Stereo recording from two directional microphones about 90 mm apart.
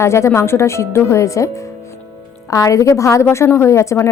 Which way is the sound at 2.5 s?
35° left (ahead or behind).